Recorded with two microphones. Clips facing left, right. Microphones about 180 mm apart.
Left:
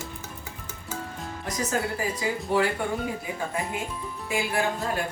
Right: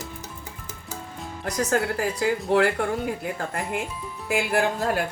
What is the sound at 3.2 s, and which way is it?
Speech, 65° right (ahead or behind).